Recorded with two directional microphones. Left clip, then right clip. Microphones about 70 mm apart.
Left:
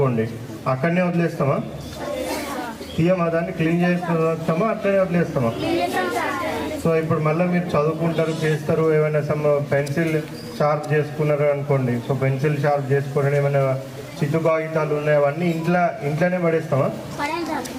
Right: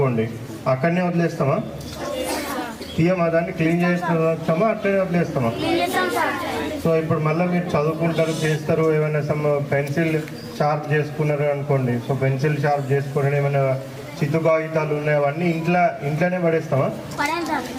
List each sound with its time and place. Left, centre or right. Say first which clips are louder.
0.6 s a man's voice: right 1 dB; centre
3.0 s a man's voice: right 1 dB; centre
5.5 s speech: right 4 dB; right
6.8 s a man's voice: even; centre
8.1 s speech: even; right
8.9 s a man's voice: left 2 dB; centre